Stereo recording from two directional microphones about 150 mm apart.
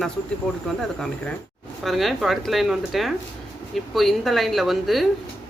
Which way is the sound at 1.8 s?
Centre (ahead or behind).